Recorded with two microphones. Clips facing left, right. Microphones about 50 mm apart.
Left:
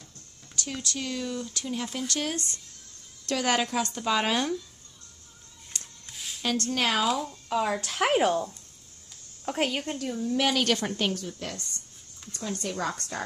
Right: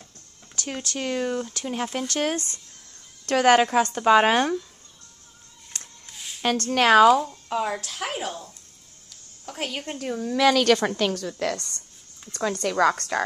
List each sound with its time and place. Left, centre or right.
0.6 s speech: right
2.3 s speech: right
3.3 s speech: right
6.0 s a sound: centre
6.4 s speech: right
7.5 s speech: right
7.8 s speech: left
9.5 s a woman's voice: left
9.9 s speech: right
10.2 s a woman's voice: right
12.6 s a woman's voice: right
12.9 s speech: right